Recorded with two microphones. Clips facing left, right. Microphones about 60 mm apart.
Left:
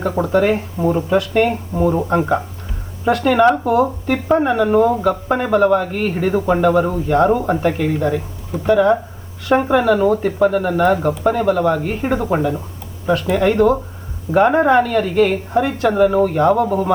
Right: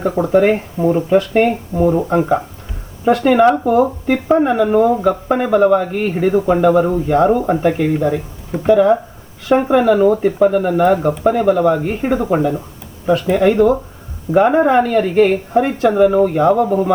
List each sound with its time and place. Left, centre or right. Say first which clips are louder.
0.0 s speech: right 3 dB; centre
0.4 s speech: right 3 dB; centre
1.7 s speech: right 3 dB; centre
3.0 s speech: right 2 dB; centre
6.3 s speech: right 2 dB; centre
6.9 s speech: right 2 dB; centre